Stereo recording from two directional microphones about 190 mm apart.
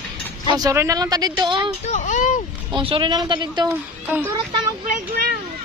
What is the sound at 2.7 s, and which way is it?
Speech, 25° right (ahead or behind).